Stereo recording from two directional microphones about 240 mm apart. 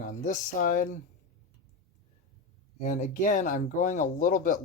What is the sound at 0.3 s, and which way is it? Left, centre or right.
Speech, left.